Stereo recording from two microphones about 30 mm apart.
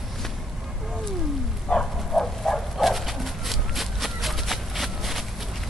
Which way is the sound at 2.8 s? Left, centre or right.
Centre.